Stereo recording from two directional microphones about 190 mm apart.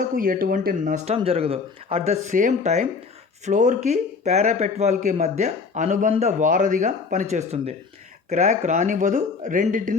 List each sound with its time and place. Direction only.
0.2 s speech: 50° right (ahead or behind)